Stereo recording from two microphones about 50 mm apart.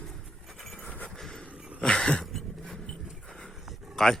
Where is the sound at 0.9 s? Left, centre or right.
Left.